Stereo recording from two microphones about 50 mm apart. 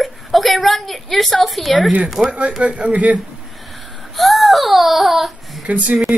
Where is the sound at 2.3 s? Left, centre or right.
Right.